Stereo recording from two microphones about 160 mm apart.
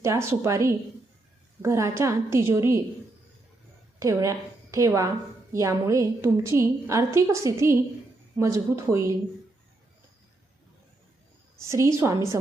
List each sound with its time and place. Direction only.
0.0 s a woman's voice: 15° right (ahead or behind)
4.0 s a woman's voice: 20° right (ahead or behind)
11.5 s a woman's voice: 15° right (ahead or behind)